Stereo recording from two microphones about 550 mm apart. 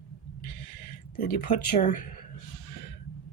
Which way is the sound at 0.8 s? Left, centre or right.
Centre.